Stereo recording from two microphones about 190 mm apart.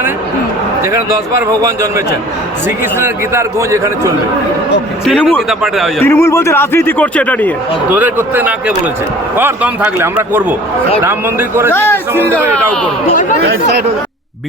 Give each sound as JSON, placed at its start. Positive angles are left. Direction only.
{"t": 0.9, "sound": "speech", "side_deg": -15}
{"t": 5.0, "sound": "a man's voice", "side_deg": 5}
{"t": 6.1, "sound": "a man's voice", "side_deg": 15}
{"t": 7.9, "sound": "speech", "side_deg": -10}
{"t": 11.7, "sound": "a man's voice", "side_deg": 10}